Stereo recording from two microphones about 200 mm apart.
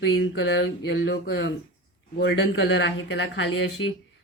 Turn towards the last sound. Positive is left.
turn(degrees=70)  # may be behind; listen again after turning